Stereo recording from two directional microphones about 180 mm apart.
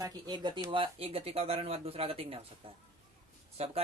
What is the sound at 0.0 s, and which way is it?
Speech, 20° right (ahead or behind).